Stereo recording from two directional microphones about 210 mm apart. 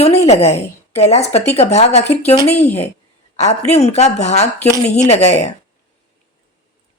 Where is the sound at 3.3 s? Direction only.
30° left (ahead or behind).